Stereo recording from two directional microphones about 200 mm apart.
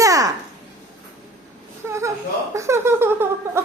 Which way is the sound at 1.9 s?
15° right (ahead or behind).